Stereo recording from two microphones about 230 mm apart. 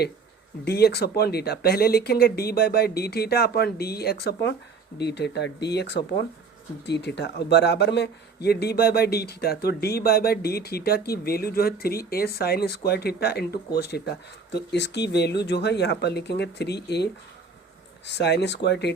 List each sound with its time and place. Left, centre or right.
0.6 s a man's voice: left